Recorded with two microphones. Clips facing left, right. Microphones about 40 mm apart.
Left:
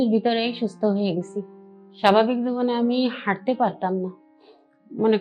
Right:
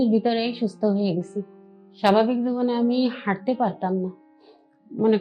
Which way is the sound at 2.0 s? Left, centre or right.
Left.